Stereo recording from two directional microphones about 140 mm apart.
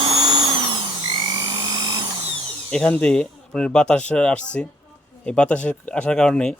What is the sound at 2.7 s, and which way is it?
Speech, 10° left (ahead or behind).